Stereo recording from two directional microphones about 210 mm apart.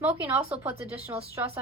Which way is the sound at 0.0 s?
10° right (ahead or behind).